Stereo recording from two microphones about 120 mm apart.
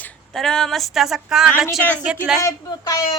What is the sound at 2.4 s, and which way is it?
Speech, 25° left (ahead or behind).